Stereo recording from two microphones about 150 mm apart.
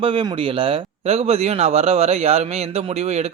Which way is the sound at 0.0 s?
35° right (ahead or behind).